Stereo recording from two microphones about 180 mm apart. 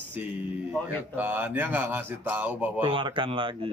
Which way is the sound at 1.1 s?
10° right (ahead or behind).